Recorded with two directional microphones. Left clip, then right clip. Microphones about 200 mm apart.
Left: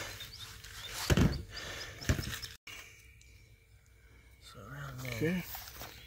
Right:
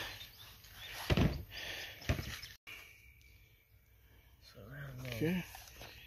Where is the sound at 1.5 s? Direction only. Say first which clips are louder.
Left 1 dB; 5° right (ahead or behind).